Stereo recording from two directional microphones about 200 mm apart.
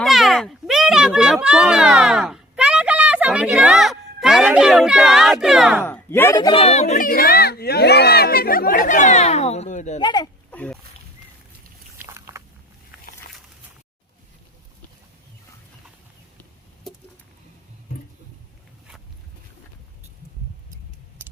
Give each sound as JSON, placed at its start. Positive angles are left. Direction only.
{"t": 0.0, "sound": "a child's voice", "side_deg": 0}
{"t": 5.8, "sound": "speech", "side_deg": 10}
{"t": 6.6, "sound": "speech", "side_deg": 35}
{"t": 10.0, "sound": "speech", "side_deg": 20}
{"t": 10.5, "sound": "speech", "side_deg": 5}
{"t": 12.1, "sound": "a sound", "side_deg": -15}